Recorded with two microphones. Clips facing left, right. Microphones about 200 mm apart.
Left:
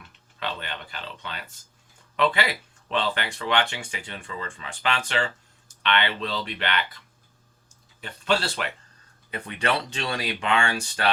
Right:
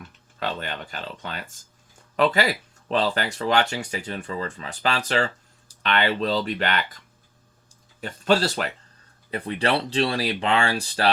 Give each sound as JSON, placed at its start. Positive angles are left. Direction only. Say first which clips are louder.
{"t": 0.0, "sound": "speech", "louder": "right 4 dB", "side_deg": -45}
{"t": 8.0, "sound": "speech", "louder": "right 4 dB", "side_deg": -40}